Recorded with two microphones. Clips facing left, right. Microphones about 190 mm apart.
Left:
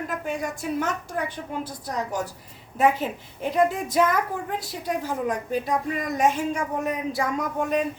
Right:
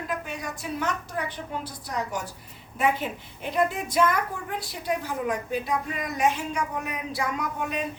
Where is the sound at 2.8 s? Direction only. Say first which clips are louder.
Left 4 dB; 40° left (ahead or behind).